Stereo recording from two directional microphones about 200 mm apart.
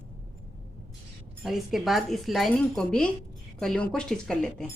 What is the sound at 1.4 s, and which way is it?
Speech, centre (ahead or behind).